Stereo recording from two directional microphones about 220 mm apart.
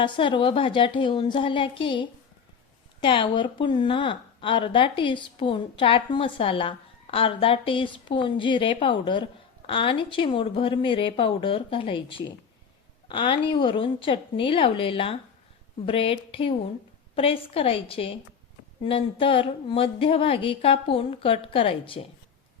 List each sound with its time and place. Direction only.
0.0 s a woman's voice: 20° left (ahead or behind)